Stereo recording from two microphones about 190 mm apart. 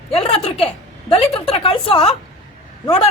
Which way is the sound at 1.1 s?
30° left (ahead or behind).